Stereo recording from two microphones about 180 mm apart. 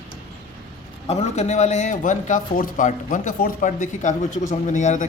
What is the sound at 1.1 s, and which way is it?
A man's voice, 35° left (ahead or behind).